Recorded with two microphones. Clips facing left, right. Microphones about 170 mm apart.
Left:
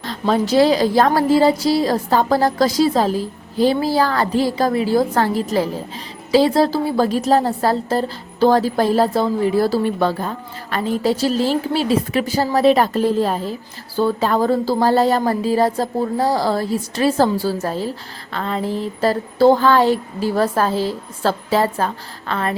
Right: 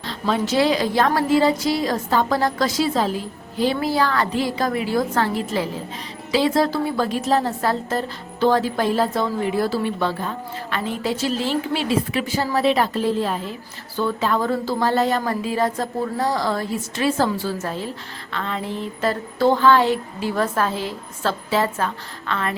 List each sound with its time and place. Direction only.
0.0 s a woman's voice: 40° left (ahead or behind)